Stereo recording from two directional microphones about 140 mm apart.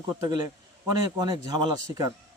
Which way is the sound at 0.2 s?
25° right (ahead or behind).